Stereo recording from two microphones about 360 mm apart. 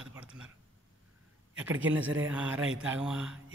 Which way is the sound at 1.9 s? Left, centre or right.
Centre.